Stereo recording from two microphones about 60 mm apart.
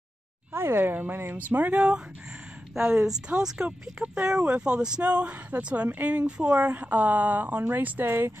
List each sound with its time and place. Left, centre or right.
0.5 s speech: right
8.0 s speech: right